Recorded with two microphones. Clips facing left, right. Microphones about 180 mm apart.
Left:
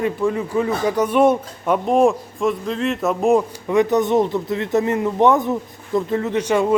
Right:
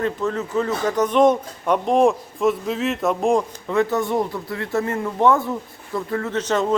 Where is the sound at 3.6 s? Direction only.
15° left (ahead or behind).